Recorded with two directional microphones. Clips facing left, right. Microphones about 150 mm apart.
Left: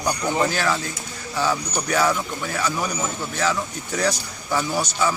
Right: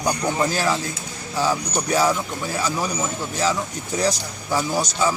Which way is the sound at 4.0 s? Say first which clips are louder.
Right 1 dB; 10° right (ahead or behind).